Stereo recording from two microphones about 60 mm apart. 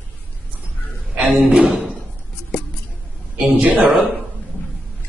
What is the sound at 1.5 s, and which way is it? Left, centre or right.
Speech, centre.